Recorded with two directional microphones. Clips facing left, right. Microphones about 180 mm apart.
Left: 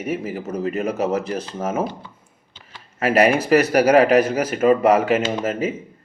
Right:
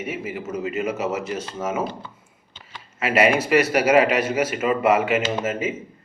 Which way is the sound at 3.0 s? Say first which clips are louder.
Left 2 dB; 35° left (ahead or behind).